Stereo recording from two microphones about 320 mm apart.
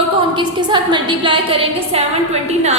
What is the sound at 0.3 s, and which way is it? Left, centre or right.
A woman's voice, centre.